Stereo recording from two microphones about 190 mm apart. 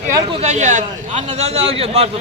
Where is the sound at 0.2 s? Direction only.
30° right (ahead or behind).